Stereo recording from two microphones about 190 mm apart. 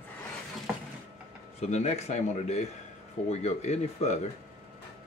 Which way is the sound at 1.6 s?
35° left (ahead or behind).